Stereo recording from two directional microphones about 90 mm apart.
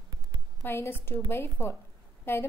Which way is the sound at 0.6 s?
25° left (ahead or behind).